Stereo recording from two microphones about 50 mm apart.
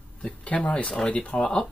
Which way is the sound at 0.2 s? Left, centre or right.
Left.